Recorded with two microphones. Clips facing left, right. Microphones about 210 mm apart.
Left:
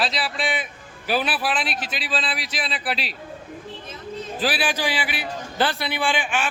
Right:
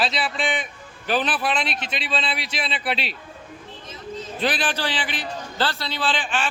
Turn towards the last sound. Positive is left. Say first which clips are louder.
# left 1 dB
turn(degrees=10)  # may be behind; listen again after turning